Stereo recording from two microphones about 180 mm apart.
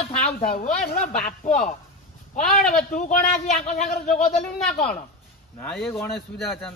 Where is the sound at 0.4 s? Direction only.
45° left (ahead or behind).